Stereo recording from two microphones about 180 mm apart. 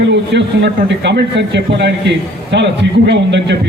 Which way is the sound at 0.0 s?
75° right (ahead or behind).